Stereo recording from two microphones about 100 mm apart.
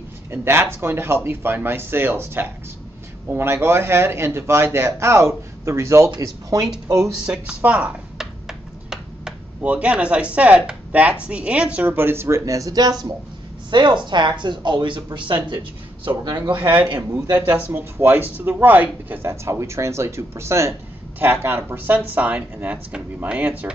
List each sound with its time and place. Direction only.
0.3 s a man's voice: 25° right (ahead or behind)
7.2 s speech: 10° right (ahead or behind)
11.9 s a man's voice: 25° right (ahead or behind)
13.7 s a man's voice: 50° right (ahead or behind)
17.6 s a man's voice: 25° right (ahead or behind)
19.4 s a man's voice: 30° right (ahead or behind)